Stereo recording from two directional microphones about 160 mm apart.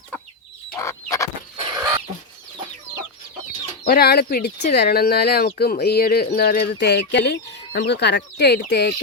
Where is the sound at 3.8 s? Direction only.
75° left (ahead or behind).